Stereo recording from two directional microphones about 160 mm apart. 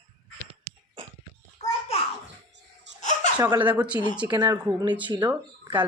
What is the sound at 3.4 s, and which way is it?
Speech, 25° right (ahead or behind).